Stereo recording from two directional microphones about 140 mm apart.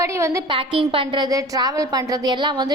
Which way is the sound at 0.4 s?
40° right (ahead or behind).